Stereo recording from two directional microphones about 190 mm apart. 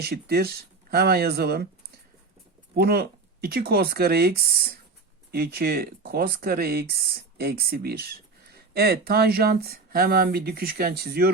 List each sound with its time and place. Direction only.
0.0 s speech: 55° right (ahead or behind)
2.7 s speech: 55° right (ahead or behind)